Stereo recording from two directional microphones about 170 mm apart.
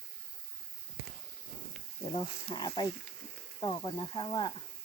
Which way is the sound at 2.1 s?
25° left (ahead or behind).